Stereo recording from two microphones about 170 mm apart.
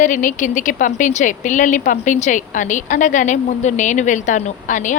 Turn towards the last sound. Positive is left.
turn(degrees=45)  # may be behind; listen again after turning